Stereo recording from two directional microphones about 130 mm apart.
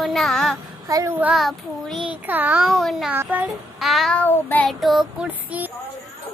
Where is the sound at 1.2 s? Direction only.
Centre (ahead or behind).